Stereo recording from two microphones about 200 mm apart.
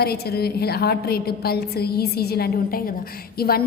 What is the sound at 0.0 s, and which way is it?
A woman's voice, 50° left (ahead or behind).